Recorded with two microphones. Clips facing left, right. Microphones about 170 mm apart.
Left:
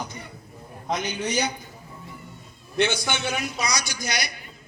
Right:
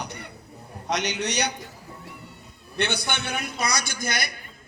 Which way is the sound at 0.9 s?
75° right (ahead or behind).